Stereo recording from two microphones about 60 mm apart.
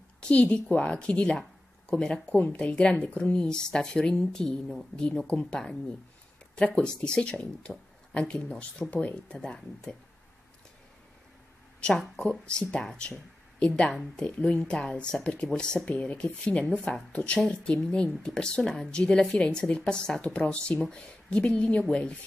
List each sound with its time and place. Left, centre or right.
0.2 s a woman's voice: left
2.3 s speech: left; by 4.8 s centre
4.9 s a woman's voice: centre
12.2 s a woman's voice: centre
13.9 s speech: centre
14.4 s a woman's voice: centre